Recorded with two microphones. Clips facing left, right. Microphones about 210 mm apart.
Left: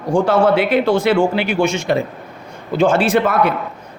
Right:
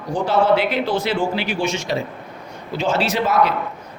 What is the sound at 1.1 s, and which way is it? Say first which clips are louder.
A man's voice: left 6 dB; 65° left (ahead or behind).